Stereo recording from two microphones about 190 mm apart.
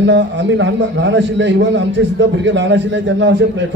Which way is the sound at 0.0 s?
70° right (ahead or behind).